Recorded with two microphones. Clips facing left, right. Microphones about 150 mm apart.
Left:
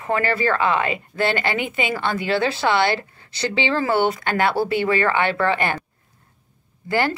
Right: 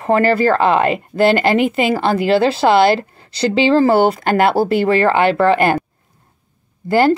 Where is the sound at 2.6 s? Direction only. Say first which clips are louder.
Right 8 dB; 35° right (ahead or behind).